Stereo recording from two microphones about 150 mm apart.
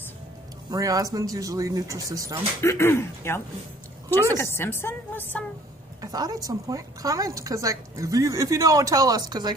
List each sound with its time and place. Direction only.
0.7 s speech: 25° right (ahead or behind)
2.6 s a woman's voice: 15° left (ahead or behind)
5.9 s speech: 25° right (ahead or behind)